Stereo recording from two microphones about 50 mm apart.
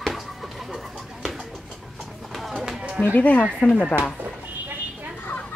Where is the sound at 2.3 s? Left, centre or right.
Centre.